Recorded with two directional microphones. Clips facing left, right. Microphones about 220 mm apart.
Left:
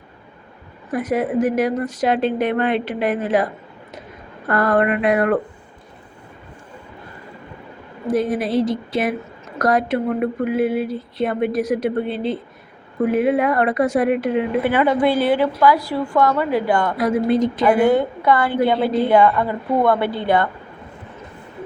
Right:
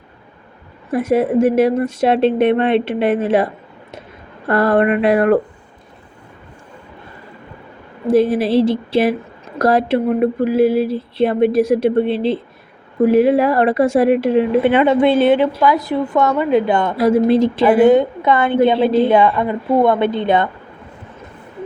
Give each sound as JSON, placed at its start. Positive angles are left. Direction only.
{"t": 0.9, "sound": "a woman's voice", "side_deg": -25}
{"t": 8.0, "sound": "a woman's voice", "side_deg": -30}
{"t": 13.1, "sound": "a woman's voice", "side_deg": -30}